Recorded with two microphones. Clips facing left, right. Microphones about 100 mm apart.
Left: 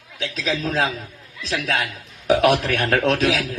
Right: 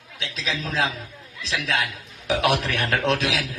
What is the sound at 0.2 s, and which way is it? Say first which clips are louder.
A man's voice: left 5 dB; 40° left (ahead or behind).